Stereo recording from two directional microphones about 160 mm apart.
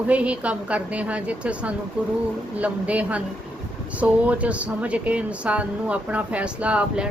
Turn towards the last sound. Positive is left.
turn(degrees=-5)  # may be behind; listen again after turning